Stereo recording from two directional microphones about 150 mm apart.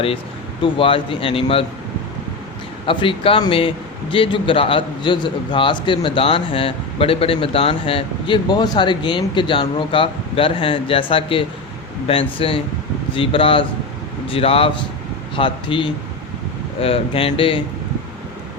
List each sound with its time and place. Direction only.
0.6 s a man's voice: 35° left (ahead or behind)
2.8 s a man's voice: 35° left (ahead or behind)